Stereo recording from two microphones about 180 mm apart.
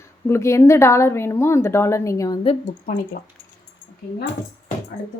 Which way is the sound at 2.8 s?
50° left (ahead or behind).